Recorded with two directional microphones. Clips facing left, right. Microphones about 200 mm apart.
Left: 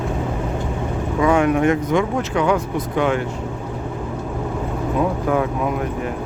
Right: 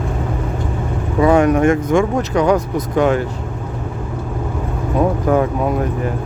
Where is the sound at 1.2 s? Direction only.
40° right (ahead or behind).